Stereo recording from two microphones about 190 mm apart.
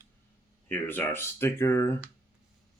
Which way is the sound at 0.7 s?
10° left (ahead or behind).